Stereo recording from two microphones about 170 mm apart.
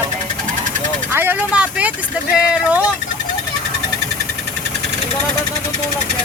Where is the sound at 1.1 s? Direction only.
10° right (ahead or behind).